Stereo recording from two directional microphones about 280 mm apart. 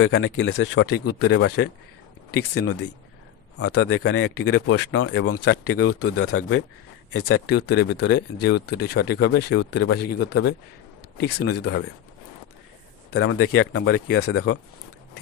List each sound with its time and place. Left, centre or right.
0.0 s speech: left
7.4 s speech: left
11.6 s speech: left
13.1 s speech: left
13.7 s speech: left